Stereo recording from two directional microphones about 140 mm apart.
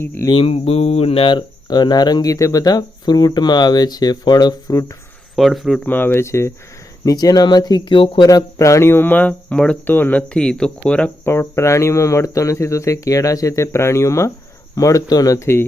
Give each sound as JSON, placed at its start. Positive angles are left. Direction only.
{"t": 0.0, "sound": "speech", "side_deg": 15}
{"t": 0.3, "sound": "speech", "side_deg": 40}
{"t": 5.4, "sound": "speech", "side_deg": 0}
{"t": 5.8, "sound": "speech", "side_deg": 15}
{"t": 8.3, "sound": "speech", "side_deg": 25}
{"t": 11.3, "sound": "speech", "side_deg": 20}